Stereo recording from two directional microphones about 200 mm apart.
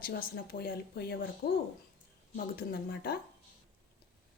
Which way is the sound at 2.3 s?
45° left (ahead or behind).